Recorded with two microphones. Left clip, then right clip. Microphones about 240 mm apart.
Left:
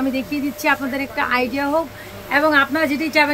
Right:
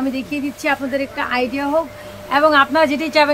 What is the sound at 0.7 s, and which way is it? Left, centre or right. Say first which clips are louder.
A woman's voice: even; centre.